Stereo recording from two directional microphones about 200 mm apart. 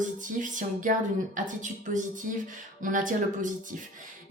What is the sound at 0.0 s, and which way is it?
Speech, 40° right (ahead or behind).